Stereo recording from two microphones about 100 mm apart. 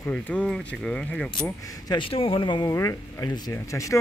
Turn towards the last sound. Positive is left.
turn(degrees=30)  # may be behind; listen again after turning